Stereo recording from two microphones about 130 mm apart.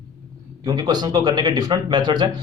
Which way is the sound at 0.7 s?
30° right (ahead or behind).